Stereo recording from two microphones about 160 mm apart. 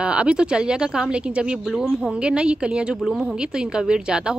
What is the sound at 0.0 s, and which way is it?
Speech, 5° right (ahead or behind).